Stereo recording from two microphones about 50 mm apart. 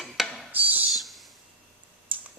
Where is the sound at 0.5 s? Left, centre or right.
Right.